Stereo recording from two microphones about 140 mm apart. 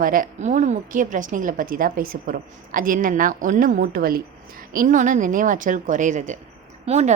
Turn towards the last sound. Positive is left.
turn(degrees=-55)  # may be behind; listen again after turning